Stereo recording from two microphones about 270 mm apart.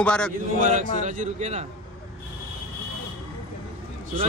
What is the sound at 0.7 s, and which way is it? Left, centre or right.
Speech, right.